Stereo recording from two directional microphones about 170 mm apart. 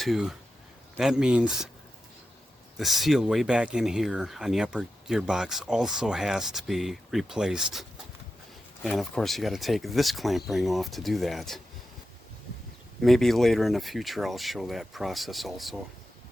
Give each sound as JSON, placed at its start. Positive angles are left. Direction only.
{"t": 0.0, "sound": "speech", "side_deg": 0}
{"t": 2.7, "sound": "speech", "side_deg": 0}
{"t": 13.0, "sound": "speech", "side_deg": 0}